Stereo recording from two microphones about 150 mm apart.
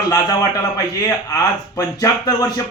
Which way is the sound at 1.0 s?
25° left (ahead or behind).